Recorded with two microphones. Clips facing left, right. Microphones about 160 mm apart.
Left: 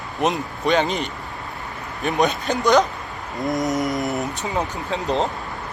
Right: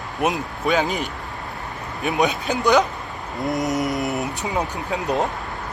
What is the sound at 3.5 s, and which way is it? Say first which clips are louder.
Mantra: left 1 dB; centre (ahead or behind).